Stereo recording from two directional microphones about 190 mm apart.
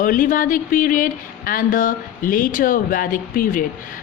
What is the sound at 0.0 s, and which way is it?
A woman's voice, 45° left (ahead or behind).